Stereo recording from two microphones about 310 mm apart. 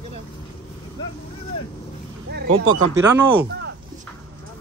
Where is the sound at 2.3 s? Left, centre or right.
Right.